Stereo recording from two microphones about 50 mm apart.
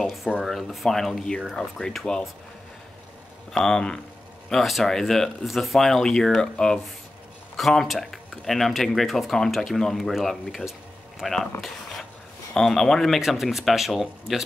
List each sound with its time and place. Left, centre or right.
0.0 s a sound: centre
0.4 s speech: centre
1.1 s speech: centre
3.5 s speech: centre
4.6 s speech: centre
7.5 s speech: centre
12.5 s speech: centre
13.2 s speech: centre